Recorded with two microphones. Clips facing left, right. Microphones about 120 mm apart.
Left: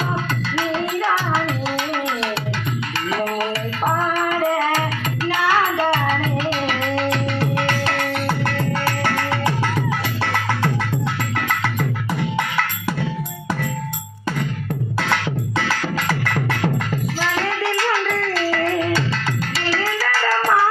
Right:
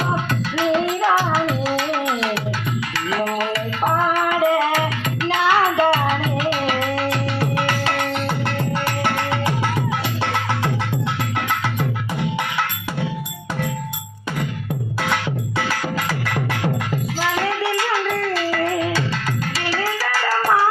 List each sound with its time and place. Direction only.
1.4 s music: 20° right (ahead or behind)
3.8 s music: 15° right (ahead or behind)
11.3 s music: 15° right (ahead or behind)
15.1 s music: 10° right (ahead or behind)